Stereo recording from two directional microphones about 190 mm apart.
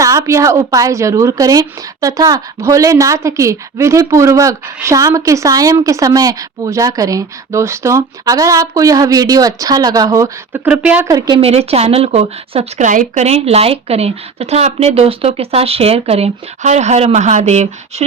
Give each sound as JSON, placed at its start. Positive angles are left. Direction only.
{"t": 0.0, "sound": "a woman's voice", "side_deg": -15}
{"t": 11.1, "sound": "a woman's voice", "side_deg": -25}